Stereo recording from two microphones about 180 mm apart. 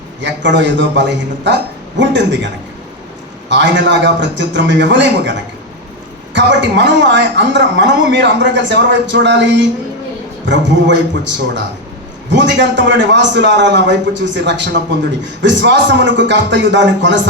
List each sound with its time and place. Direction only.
0.2 s a woman's voice: 80° right
3.5 s a woman's voice: 85° right